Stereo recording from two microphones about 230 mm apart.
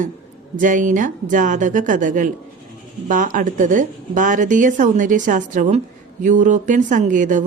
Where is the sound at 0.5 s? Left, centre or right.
Right.